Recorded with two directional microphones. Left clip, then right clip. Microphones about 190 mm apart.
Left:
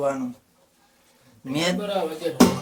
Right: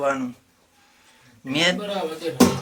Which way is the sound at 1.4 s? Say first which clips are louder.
Right 4 dB; 5° left (ahead or behind).